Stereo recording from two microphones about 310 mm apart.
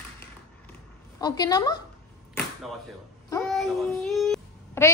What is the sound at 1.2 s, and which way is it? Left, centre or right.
Speech, centre.